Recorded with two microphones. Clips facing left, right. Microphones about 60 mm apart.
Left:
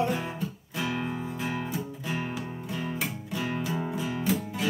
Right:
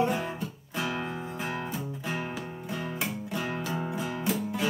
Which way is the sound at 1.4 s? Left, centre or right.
Centre.